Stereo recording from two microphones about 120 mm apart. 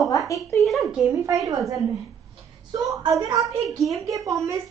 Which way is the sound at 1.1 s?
30° right (ahead or behind).